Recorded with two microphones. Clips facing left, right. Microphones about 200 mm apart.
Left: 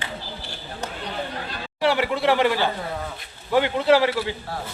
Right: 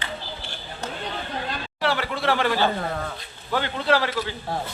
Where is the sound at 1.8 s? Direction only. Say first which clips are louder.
Left 5 dB; 15° left (ahead or behind).